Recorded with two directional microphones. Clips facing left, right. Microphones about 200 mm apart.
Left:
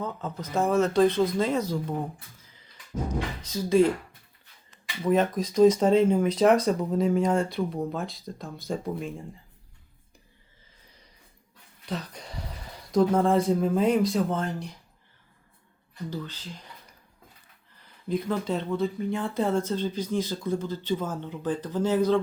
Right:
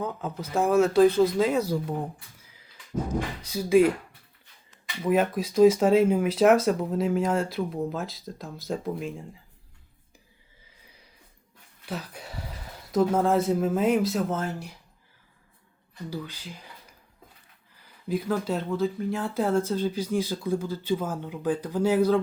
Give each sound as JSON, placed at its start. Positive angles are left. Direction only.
{"t": 0.0, "sound": "speech", "side_deg": -10}
{"t": 3.4, "sound": "speech", "side_deg": -10}
{"t": 5.0, "sound": "speech", "side_deg": -10}
{"t": 11.9, "sound": "speech", "side_deg": -5}
{"t": 16.0, "sound": "speech", "side_deg": -10}
{"t": 18.1, "sound": "speech", "side_deg": -5}